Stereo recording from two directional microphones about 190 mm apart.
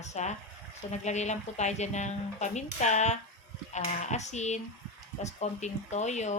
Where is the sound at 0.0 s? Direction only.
35° left (ahead or behind).